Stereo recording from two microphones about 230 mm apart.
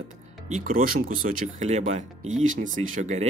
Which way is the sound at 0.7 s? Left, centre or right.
Right.